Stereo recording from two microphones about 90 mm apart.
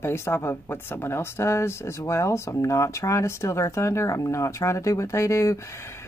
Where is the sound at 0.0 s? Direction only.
30° left (ahead or behind).